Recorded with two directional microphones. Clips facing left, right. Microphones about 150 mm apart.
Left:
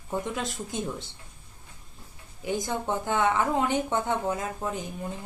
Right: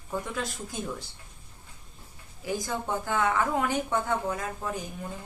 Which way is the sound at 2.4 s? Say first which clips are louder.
Left 2 dB; 20° left (ahead or behind).